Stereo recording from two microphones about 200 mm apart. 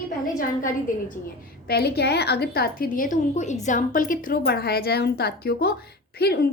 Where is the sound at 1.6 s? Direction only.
50° left (ahead or behind).